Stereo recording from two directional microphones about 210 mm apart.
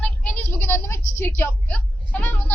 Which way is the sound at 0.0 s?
5° left (ahead or behind).